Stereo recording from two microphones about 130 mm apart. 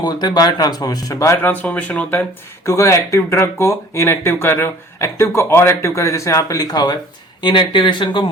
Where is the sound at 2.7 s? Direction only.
20° left (ahead or behind).